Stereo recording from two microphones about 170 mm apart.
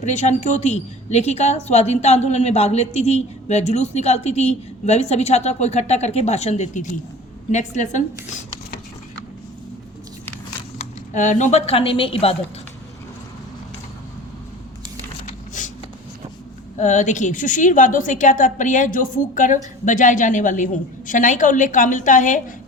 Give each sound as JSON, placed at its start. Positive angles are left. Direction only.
{"t": 0.0, "sound": "a woman's voice", "side_deg": 45}
{"t": 11.1, "sound": "a woman's voice", "side_deg": 45}
{"t": 15.6, "sound": "a sound", "side_deg": 50}
{"t": 16.7, "sound": "a woman's voice", "side_deg": 45}